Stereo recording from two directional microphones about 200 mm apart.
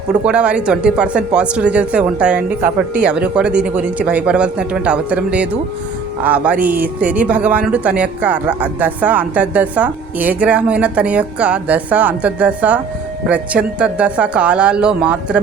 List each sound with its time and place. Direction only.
0.1 s speech: 5° right (ahead or behind)